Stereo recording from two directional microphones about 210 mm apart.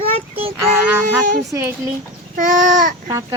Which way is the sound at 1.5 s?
15° right (ahead or behind).